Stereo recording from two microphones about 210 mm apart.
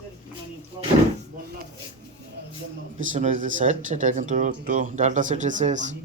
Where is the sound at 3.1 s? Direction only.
35° right (ahead or behind).